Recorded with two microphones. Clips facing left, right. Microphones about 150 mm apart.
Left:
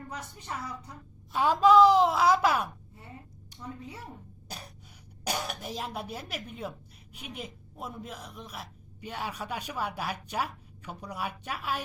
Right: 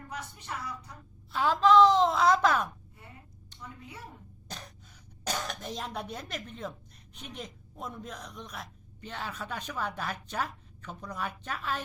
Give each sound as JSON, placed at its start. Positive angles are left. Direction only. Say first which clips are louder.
{"t": 1.3, "sound": "speech", "louder": "left 2 dB", "side_deg": 15}
{"t": 3.5, "sound": "a sound", "louder": "left 2 dB", "side_deg": 10}
{"t": 4.4, "sound": "gasp", "louder": "even", "side_deg": 10}
{"t": 5.2, "sound": "speech", "louder": "left 1 dB", "side_deg": 10}